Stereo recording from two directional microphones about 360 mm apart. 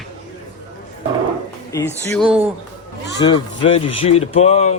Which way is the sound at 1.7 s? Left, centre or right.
Centre.